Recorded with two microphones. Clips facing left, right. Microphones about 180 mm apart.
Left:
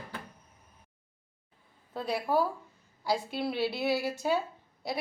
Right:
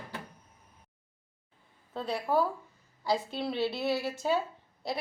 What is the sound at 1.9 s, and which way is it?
A woman's voice, 10° left (ahead or behind).